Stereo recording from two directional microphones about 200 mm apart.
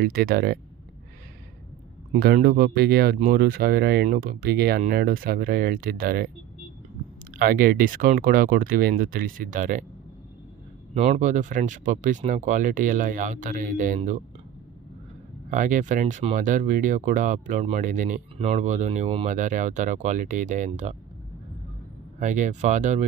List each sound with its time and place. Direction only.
0.0 s speech: 50° right (ahead or behind)
2.1 s speech: 50° right (ahead or behind)
7.3 s speech: 45° right (ahead or behind)
11.0 s speech: 35° right (ahead or behind)
15.5 s speech: 40° right (ahead or behind)
22.2 s speech: 40° right (ahead or behind)